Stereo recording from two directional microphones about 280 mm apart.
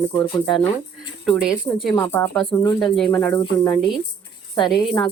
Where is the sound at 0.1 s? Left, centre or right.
Centre.